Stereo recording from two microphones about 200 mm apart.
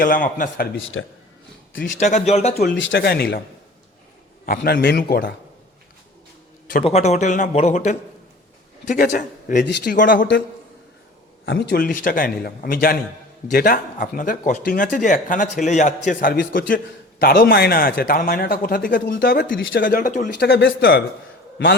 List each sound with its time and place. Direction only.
0.0 s speech: 45° left (ahead or behind)
0.9 s speech: 75° left (ahead or behind)
1.7 s a man's voice: 65° left (ahead or behind)
2.0 s speech: 35° left (ahead or behind)
2.6 s speech: 60° left (ahead or behind)
4.4 s speech: 45° left (ahead or behind)
6.8 s a man's voice: 35° left (ahead or behind)
9.6 s speech: 55° left (ahead or behind)
11.4 s speech: 55° left (ahead or behind)
20.5 s speech: 55° left (ahead or behind)